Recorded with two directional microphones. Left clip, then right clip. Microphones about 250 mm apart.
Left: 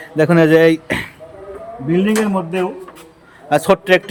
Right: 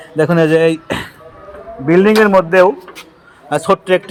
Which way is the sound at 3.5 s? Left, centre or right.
Centre.